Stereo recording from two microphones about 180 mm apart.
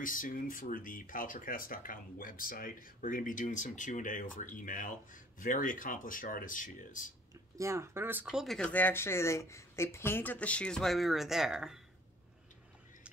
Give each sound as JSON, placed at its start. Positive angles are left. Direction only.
{"t": 0.0, "sound": "speech", "side_deg": 50}
{"t": 7.5, "sound": "speech", "side_deg": -15}